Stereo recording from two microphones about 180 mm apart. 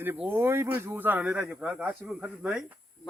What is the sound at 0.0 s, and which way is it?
Speech, 10° right (ahead or behind).